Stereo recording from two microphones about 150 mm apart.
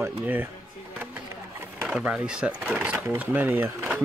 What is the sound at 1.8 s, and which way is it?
Speech, 5° right (ahead or behind).